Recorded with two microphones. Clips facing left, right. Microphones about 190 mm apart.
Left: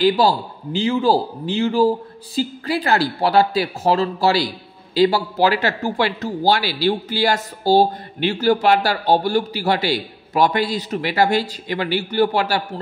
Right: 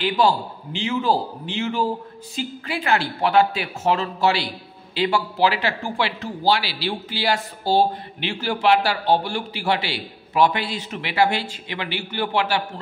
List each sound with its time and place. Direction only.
0.0 s speech: 35° left (ahead or behind)